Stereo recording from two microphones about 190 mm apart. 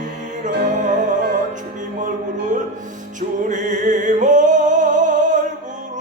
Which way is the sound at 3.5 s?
40° right (ahead or behind).